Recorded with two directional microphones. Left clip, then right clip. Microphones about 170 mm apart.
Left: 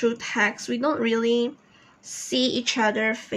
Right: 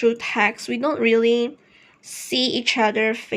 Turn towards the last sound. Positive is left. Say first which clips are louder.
# right 3 dB
turn(degrees=-30)  # may be behind; listen again after turning